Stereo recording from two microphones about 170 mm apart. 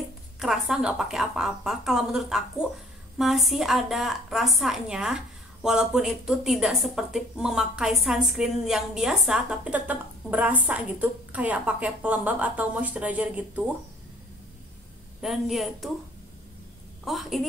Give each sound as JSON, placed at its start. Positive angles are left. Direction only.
{"t": 0.4, "sound": "a woman's voice", "side_deg": 0}
{"t": 15.2, "sound": "a woman's voice", "side_deg": 0}
{"t": 17.0, "sound": "a woman's voice", "side_deg": 0}